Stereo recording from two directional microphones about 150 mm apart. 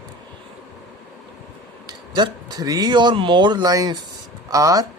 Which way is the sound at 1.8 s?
25° right (ahead or behind).